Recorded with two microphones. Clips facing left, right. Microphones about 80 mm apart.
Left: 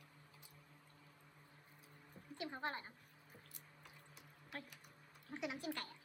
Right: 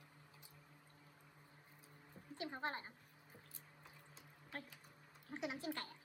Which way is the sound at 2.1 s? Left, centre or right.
Centre.